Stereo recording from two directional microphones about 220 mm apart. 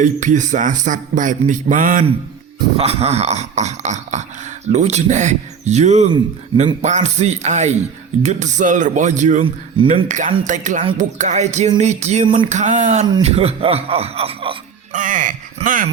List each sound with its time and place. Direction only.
0.0 s a man's voice: 35° right (ahead or behind)
14.9 s a man's voice: 35° right (ahead or behind)